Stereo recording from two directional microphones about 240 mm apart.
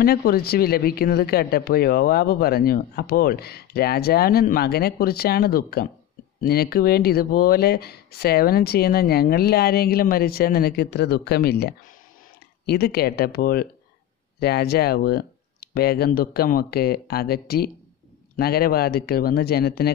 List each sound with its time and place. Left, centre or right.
0.0 s speech: left